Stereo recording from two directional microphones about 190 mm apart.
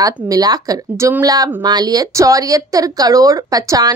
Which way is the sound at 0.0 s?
20° right (ahead or behind).